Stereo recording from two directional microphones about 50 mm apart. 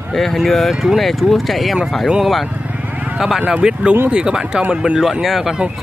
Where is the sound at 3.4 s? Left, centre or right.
Right.